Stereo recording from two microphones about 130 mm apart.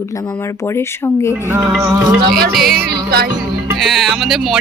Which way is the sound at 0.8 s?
20° left (ahead or behind).